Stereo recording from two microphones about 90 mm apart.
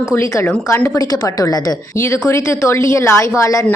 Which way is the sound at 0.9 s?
45° left (ahead or behind).